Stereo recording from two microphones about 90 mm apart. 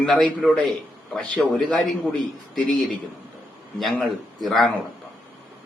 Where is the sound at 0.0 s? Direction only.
5° left (ahead or behind).